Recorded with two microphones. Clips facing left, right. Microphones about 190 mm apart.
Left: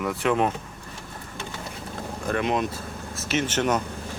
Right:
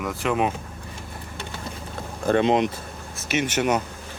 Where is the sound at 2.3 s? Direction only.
25° right (ahead or behind).